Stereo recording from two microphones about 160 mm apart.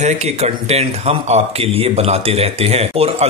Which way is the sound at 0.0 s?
45° right (ahead or behind).